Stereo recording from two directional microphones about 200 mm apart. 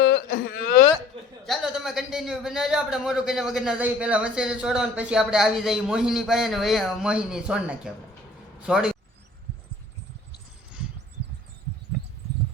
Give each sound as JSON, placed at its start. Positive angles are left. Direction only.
{"t": 0.0, "sound": "wail", "side_deg": 55}
{"t": 1.5, "sound": "a man's voice", "side_deg": 0}